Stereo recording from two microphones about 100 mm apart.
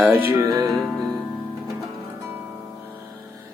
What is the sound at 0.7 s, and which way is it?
Music, centre (ahead or behind).